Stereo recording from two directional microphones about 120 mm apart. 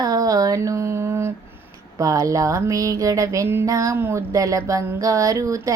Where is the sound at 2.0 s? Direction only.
30° right (ahead or behind).